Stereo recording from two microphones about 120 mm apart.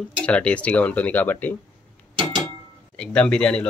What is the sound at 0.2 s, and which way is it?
Speech, 10° left (ahead or behind).